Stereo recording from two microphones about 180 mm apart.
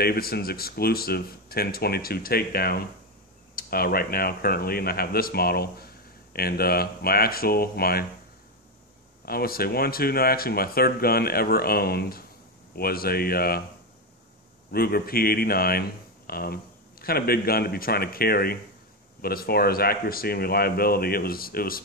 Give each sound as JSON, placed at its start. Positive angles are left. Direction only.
{"t": 0.0, "sound": "speech", "side_deg": 60}
{"t": 9.2, "sound": "speech", "side_deg": 55}
{"t": 14.7, "sound": "speech", "side_deg": 60}